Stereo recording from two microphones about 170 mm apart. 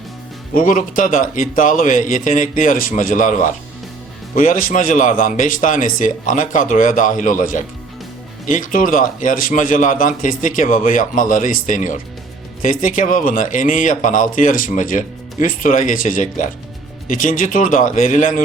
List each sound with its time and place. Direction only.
0.5 s a man's voice: 50° left (ahead or behind)